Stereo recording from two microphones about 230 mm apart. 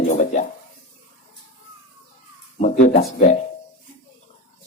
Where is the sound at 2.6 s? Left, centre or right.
Left.